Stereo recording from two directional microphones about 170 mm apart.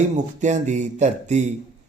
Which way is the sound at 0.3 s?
45° right (ahead or behind).